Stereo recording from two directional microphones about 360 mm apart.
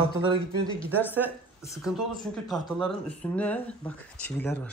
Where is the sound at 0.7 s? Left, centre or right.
Centre.